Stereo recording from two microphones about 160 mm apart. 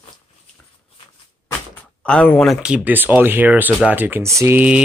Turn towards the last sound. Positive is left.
turn(degrees=-10)  # may be behind; listen again after turning